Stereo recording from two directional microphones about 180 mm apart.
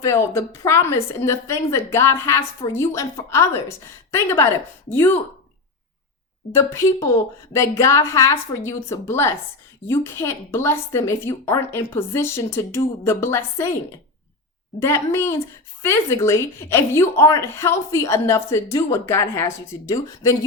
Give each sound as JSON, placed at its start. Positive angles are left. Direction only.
{"t": 0.0, "sound": "a woman's voice", "side_deg": 15}
{"t": 6.5, "sound": "a woman's voice", "side_deg": 15}
{"t": 14.8, "sound": "a woman's voice", "side_deg": 15}